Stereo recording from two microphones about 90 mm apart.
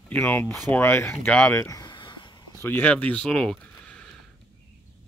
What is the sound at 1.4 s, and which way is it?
Speech, 35° left (ahead or behind).